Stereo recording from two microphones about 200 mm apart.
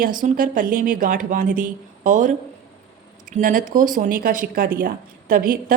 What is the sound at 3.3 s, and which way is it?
A woman's voice, 40° right (ahead or behind).